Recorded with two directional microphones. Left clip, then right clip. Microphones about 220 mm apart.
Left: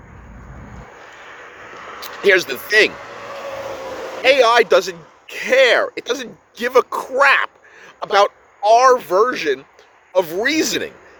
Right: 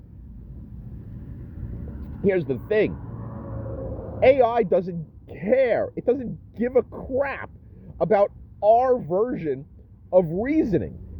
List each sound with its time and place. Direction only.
2.2 s speech: 15° left (ahead or behind)
2.9 s vehicle: 35° left (ahead or behind)
4.1 s a man's voice: 15° left (ahead or behind)